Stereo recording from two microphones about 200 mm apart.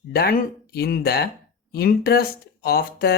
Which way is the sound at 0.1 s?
50° left (ahead or behind).